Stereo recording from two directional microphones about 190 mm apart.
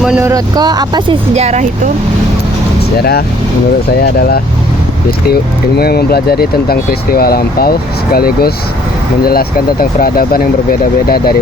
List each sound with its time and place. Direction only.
0.0 s speech: 5° right (ahead or behind)
0.3 s speech: 20° right (ahead or behind)
1.3 s speech: 35° right (ahead or behind)
3.0 s speech: 55° left (ahead or behind)